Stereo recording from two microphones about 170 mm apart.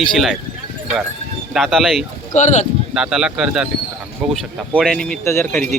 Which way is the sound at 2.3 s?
45° left (ahead or behind).